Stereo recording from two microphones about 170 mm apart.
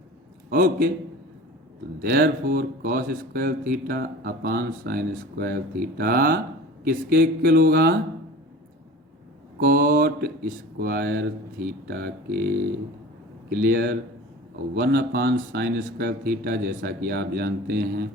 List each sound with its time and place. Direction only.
0.5 s speech: 55° right (ahead or behind)
2.0 s speech: 60° right (ahead or behind)
9.6 s speech: 55° right (ahead or behind)
13.7 s speech: 65° right (ahead or behind)
14.8 s speech: 90° right
15.5 s speech: 70° right (ahead or behind)